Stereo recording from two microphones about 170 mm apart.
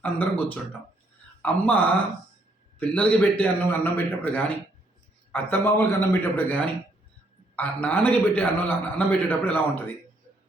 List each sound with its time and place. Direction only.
0.0 s a man's voice: 10° left (ahead or behind)